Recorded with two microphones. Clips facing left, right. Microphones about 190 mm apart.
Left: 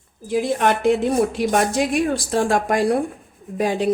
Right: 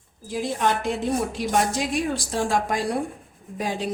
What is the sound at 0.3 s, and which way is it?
Speech, 65° left (ahead or behind).